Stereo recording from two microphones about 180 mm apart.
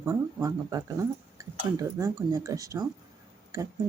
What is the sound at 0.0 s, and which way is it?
Speech, 15° right (ahead or behind).